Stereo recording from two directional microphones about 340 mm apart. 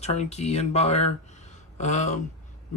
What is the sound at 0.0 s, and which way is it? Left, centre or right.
Speech, centre.